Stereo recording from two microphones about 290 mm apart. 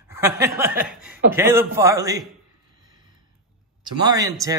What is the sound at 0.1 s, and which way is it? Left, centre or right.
Music, centre.